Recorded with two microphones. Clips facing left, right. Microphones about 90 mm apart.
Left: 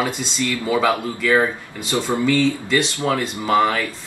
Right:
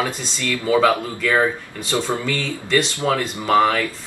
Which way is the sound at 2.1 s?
20° left (ahead or behind).